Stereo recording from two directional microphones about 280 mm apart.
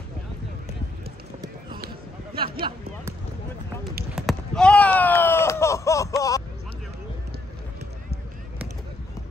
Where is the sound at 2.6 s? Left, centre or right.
Centre.